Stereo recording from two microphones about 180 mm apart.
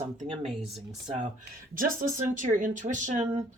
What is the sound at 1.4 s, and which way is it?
Speech, 50° right (ahead or behind).